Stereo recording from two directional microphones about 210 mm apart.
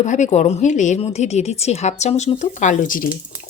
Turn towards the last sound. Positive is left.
turn(degrees=40)  # may be behind; listen again after turning